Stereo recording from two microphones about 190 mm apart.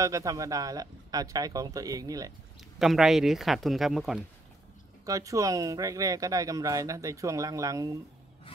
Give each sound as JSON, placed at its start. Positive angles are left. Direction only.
{"t": 0.0, "sound": "speech", "side_deg": -15}
{"t": 2.8, "sound": "speech", "side_deg": 0}
{"t": 5.0, "sound": "speech", "side_deg": -15}